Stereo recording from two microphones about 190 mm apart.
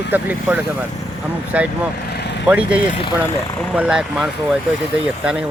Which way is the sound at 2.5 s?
5° right (ahead or behind).